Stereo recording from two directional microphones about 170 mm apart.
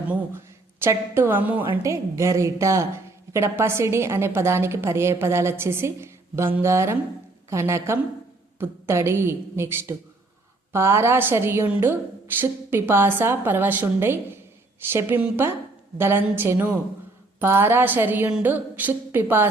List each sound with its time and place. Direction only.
0.8 s a woman's voice: 15° right (ahead or behind)